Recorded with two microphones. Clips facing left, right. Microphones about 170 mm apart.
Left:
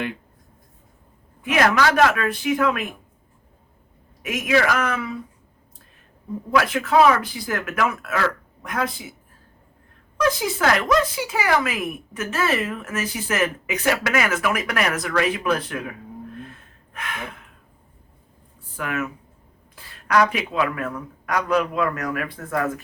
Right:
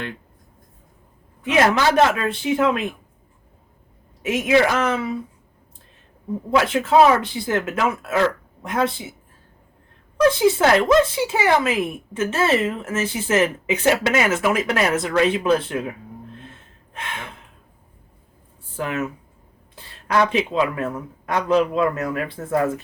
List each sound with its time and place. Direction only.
1.5 s speech: 25° right (ahead or behind)
4.2 s speech: 25° right (ahead or behind)
6.5 s speech: 25° right (ahead or behind)
10.2 s speech: 25° right (ahead or behind)
16.5 s gasp: 25° right (ahead or behind)
18.8 s speech: 25° right (ahead or behind)